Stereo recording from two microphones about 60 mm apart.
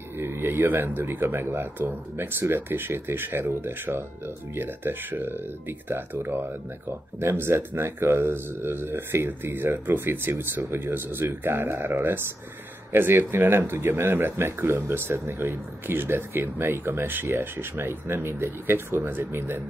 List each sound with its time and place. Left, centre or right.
0.2 s speech: right